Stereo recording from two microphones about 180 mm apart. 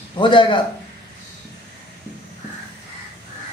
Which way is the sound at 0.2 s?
25° left (ahead or behind).